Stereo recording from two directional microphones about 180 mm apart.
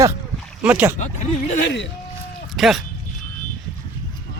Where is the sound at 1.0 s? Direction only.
40° left (ahead or behind).